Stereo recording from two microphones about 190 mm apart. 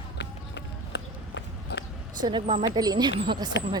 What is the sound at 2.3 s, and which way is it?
Speech, 25° right (ahead or behind).